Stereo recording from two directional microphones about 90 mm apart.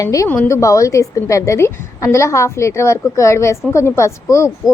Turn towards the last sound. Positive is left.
turn(degrees=30)  # may be behind; listen again after turning